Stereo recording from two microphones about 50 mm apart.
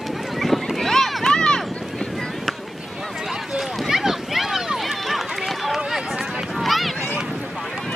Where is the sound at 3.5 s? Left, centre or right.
Centre.